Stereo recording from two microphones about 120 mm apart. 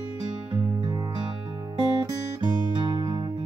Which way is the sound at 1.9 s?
40° right (ahead or behind).